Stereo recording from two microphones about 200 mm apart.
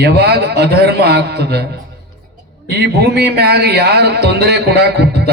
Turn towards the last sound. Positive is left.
turn(degrees=-55)  # may be behind; listen again after turning